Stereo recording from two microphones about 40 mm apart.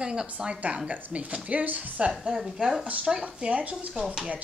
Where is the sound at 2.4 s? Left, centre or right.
Centre.